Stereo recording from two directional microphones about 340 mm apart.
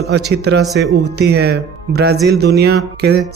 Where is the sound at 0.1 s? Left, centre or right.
Right.